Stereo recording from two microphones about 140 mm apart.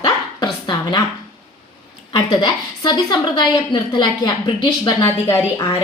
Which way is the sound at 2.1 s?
30° left (ahead or behind).